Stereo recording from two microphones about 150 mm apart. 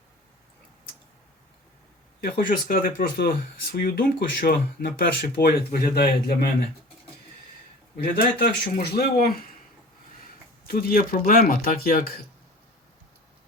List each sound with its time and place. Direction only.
2.2 s speech: 85° left
7.9 s speech: 85° left
10.6 s speech: 75° left (ahead or behind)